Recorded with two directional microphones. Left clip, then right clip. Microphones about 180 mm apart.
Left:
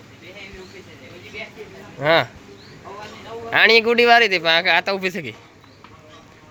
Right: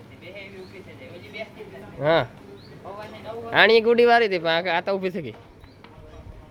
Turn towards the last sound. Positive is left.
turn(degrees=-10)  # may be behind; listen again after turning